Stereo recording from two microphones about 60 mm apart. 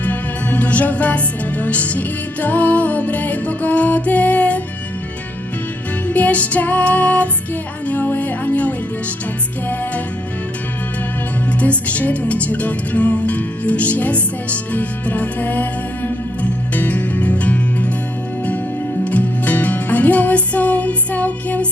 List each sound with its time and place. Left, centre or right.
0.0 s music: left
6.1 s music: left
11.6 s music: left
19.0 s music: left